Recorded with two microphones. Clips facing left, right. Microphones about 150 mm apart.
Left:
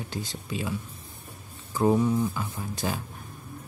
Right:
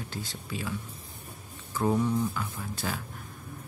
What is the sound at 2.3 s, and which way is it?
Speech, 20° left (ahead or behind).